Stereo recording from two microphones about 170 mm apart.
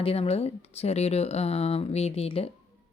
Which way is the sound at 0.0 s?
35° left (ahead or behind).